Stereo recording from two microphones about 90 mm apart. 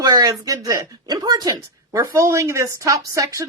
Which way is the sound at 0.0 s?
45° right (ahead or behind).